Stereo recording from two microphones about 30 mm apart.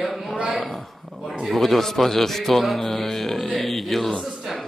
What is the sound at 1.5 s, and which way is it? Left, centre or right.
A man's voice, centre.